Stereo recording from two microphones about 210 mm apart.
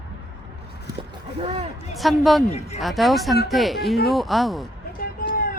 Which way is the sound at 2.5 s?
30° left (ahead or behind).